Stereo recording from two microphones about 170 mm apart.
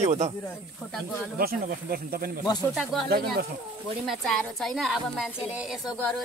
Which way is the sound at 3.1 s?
65° right (ahead or behind).